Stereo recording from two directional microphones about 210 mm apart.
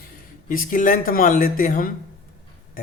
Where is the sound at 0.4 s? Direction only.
40° left (ahead or behind).